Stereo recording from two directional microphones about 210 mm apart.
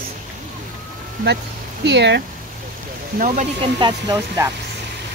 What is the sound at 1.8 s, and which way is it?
Speech, 55° right (ahead or behind).